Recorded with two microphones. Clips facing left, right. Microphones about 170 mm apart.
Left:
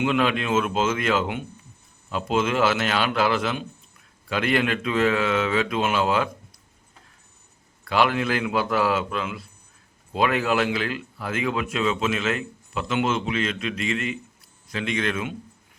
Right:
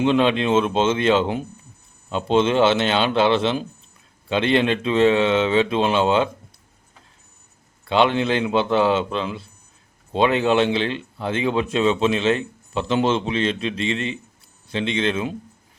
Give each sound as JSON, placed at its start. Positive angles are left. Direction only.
{"t": 0.0, "sound": "speech", "side_deg": -25}
{"t": 7.9, "sound": "speech", "side_deg": -25}